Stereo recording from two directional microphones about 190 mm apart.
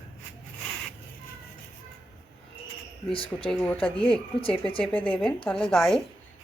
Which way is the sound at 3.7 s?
30° left (ahead or behind).